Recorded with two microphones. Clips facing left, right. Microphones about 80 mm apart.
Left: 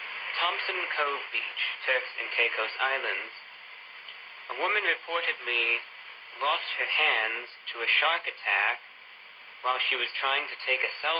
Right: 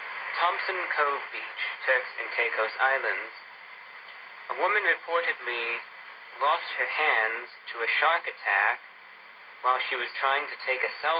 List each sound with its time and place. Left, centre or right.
0.0 s speech: right
4.4 s speech: right